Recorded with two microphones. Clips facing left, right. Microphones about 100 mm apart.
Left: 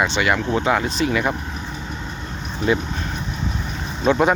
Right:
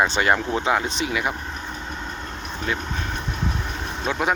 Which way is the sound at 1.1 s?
10° right (ahead or behind).